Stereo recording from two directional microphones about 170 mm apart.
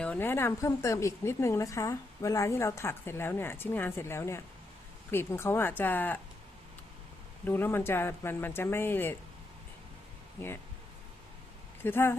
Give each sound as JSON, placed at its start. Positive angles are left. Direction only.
{"t": 0.0, "sound": "speech", "side_deg": 10}
{"t": 7.4, "sound": "speech", "side_deg": 10}
{"t": 11.8, "sound": "speech", "side_deg": 15}